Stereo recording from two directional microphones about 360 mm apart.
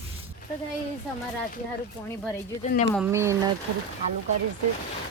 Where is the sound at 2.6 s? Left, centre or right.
Centre.